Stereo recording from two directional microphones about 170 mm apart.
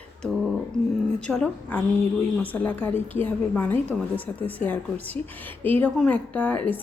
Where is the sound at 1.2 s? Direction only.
5° left (ahead or behind).